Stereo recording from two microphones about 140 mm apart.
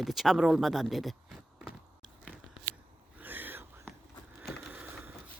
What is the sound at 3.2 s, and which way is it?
Whispering, 15° right (ahead or behind).